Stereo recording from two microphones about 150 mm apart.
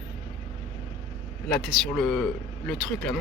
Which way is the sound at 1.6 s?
Centre (ahead or behind).